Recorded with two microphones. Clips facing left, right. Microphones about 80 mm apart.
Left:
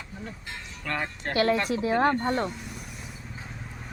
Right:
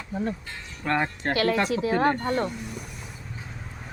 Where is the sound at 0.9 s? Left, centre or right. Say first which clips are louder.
Right 6 dB; right.